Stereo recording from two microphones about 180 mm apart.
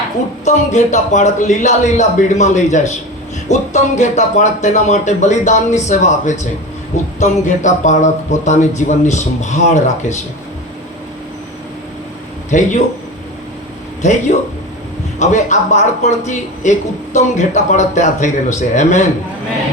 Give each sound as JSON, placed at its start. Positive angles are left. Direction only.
{"t": 0.4, "sound": "a man's voice", "side_deg": 40}
{"t": 12.5, "sound": "a man's voice", "side_deg": 40}
{"t": 14.0, "sound": "a man's voice", "side_deg": 40}